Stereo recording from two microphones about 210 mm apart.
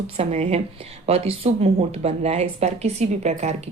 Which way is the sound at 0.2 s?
30° right (ahead or behind).